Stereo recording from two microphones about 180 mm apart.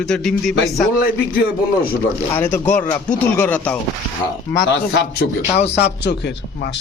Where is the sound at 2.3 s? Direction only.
15° left (ahead or behind).